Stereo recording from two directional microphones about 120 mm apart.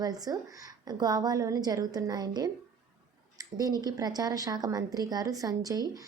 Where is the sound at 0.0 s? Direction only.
30° right (ahead or behind).